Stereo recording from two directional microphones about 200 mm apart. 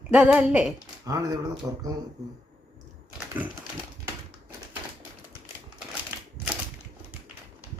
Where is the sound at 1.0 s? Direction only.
15° right (ahead or behind).